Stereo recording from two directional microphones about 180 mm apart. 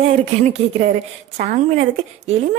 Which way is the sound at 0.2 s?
40° right (ahead or behind).